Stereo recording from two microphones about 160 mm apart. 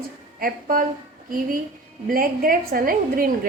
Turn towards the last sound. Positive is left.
turn(degrees=-60)  # may be behind; listen again after turning